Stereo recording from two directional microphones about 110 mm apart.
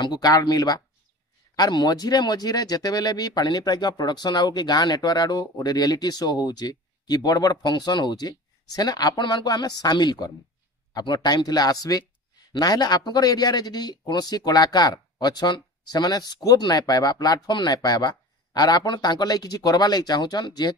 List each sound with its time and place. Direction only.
0.0 s speech: 35° left (ahead or behind)